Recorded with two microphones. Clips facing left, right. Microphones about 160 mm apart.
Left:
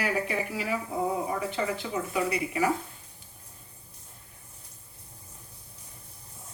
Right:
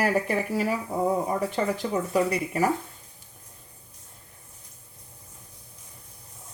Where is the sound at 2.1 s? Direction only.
40° right (ahead or behind).